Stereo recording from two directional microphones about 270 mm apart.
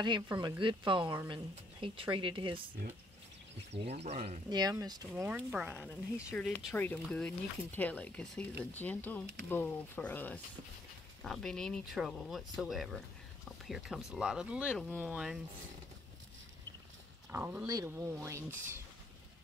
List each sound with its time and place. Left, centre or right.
0.0 s a woman's voice: centre
3.7 s a woman's voice: right; by 15.4 s centre
17.3 s a woman's voice: centre